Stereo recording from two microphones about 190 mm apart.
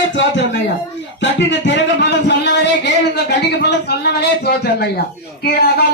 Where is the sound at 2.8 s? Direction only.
60° left (ahead or behind).